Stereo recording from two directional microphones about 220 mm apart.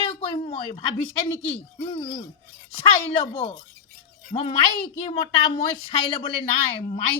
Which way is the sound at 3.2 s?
25° left (ahead or behind).